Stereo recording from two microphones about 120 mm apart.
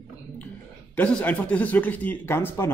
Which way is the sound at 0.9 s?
10° left (ahead or behind).